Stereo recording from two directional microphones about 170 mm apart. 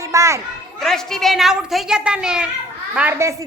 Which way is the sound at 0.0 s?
20° right (ahead or behind).